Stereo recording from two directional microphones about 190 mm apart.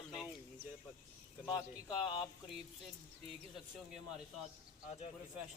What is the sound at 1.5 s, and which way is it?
Speech, 20° left (ahead or behind).